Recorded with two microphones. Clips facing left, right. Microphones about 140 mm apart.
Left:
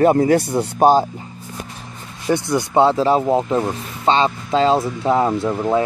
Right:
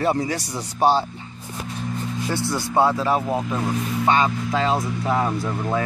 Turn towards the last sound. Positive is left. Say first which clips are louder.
# left 6 dB
turn(degrees=25)  # may be behind; listen again after turning